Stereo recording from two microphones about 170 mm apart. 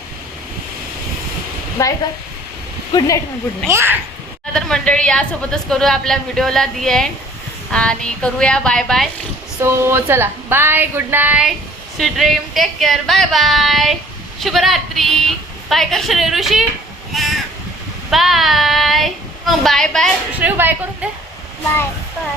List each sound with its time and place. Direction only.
1.8 s a woman's voice: 20° left (ahead or behind)
3.7 s speech: 15° right (ahead or behind)
4.5 s a woman's voice: 5° left (ahead or behind)
9.6 s a woman's voice: 15° right (ahead or behind)
17.2 s crow: centre (ahead or behind)
18.1 s a woman's voice: centre (ahead or behind)
20.3 s speech: 10° right (ahead or behind)